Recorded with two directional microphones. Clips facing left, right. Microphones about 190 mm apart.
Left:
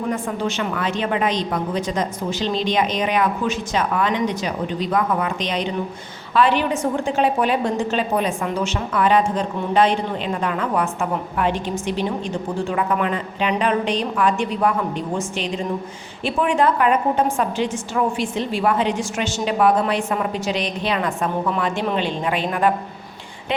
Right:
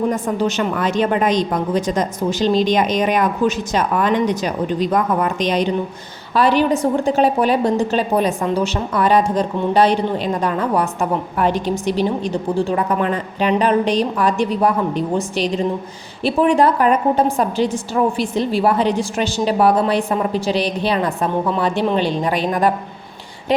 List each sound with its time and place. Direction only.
0.1 s a woman's voice: 40° right (ahead or behind)